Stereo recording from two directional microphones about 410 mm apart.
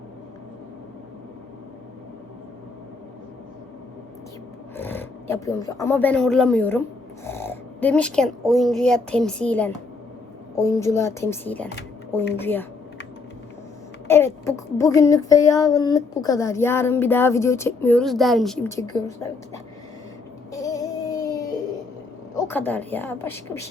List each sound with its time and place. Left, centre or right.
4.8 s speech: centre
10.6 s child singing: centre
12.1 s speech: centre
14.1 s child singing: centre
20.5 s music: centre
22.4 s speech: centre